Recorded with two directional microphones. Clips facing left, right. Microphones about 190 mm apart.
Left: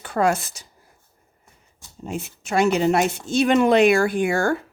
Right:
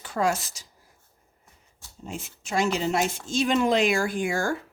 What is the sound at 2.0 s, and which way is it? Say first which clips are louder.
Speech: left 6 dB; 60° left (ahead or behind).